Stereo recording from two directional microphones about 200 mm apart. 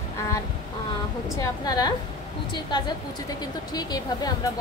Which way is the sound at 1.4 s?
20° left (ahead or behind).